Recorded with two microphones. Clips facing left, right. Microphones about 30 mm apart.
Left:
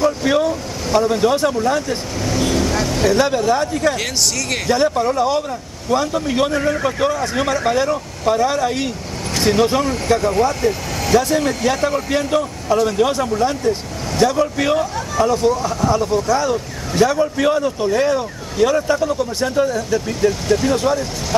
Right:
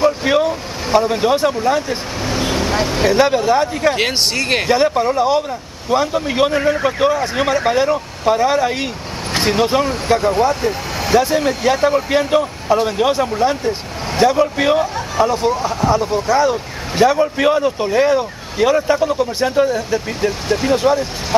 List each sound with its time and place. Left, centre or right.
0.0 s speech: right
3.9 s speech: right
4.6 s a man's voice: right